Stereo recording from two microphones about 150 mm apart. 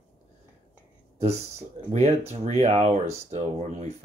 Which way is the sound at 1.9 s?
45° right (ahead or behind).